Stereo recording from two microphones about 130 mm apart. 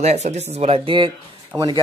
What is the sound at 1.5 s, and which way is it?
Speech, 20° right (ahead or behind).